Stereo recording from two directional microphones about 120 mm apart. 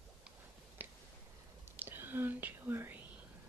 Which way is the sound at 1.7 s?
15° right (ahead or behind).